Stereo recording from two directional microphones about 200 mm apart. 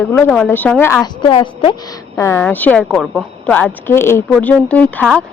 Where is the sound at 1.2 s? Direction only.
25° left (ahead or behind).